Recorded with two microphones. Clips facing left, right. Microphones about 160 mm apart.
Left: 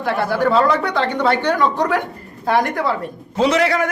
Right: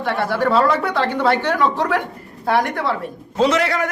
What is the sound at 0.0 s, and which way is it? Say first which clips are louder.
A man's voice: left 1 dB; centre (ahead or behind).